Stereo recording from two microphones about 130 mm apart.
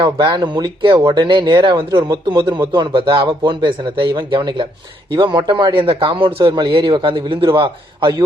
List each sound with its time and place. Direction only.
0.0 s a man's voice: 35° right (ahead or behind)